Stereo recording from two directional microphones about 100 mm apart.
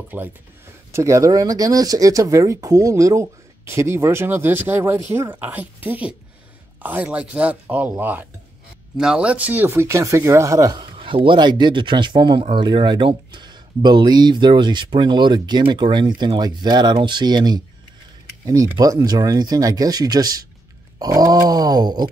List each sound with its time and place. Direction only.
0.1 s speech: 20° right (ahead or behind)
0.9 s speech: 30° right (ahead or behind)
8.9 s speech: 5° right (ahead or behind); by 10.9 s 40° right (ahead or behind)
11.0 s speech: 60° right (ahead or behind); by 22.0 s 40° right (ahead or behind)